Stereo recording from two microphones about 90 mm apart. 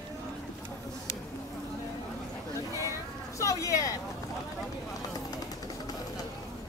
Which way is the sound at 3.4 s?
35° left (ahead or behind).